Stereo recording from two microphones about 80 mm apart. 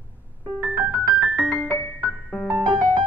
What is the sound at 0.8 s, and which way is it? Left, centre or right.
Keyboard, centre.